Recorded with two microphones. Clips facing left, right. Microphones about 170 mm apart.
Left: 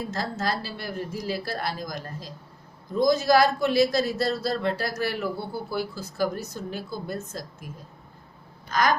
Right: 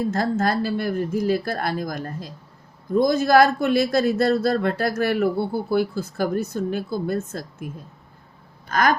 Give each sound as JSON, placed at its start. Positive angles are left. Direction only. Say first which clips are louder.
{"t": 0.1, "sound": "a man's voice", "louder": "right 7 dB", "side_deg": -55}